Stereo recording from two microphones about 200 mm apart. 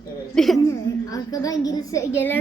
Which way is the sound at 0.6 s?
15° left (ahead or behind).